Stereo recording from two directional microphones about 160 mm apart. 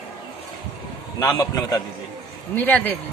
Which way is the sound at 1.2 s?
20° left (ahead or behind).